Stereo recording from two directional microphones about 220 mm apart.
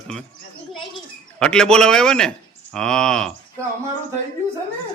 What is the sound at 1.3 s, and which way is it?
Speech, 5° left (ahead or behind).